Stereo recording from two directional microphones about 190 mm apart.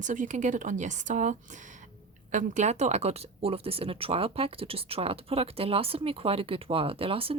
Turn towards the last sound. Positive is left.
turn(degrees=-30)  # may be behind; listen again after turning